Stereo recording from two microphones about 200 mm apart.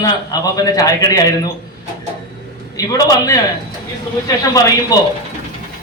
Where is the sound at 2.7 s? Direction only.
20° left (ahead or behind).